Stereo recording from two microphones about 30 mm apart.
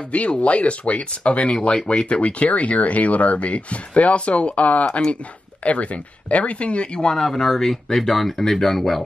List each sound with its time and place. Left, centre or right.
0.1 s speech: left
7.2 s speech: centre